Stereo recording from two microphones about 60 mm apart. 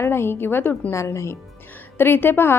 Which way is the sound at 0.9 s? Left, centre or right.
Left.